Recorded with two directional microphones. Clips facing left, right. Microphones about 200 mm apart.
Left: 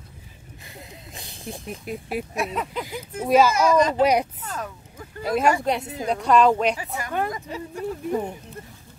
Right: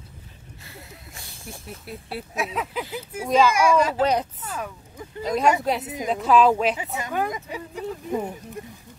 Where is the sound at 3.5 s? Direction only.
10° right (ahead or behind).